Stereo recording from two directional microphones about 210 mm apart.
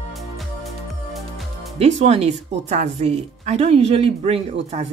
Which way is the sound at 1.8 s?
30° right (ahead or behind).